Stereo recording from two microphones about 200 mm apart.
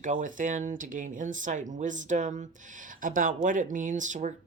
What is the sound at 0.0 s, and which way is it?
Speech, 40° right (ahead or behind).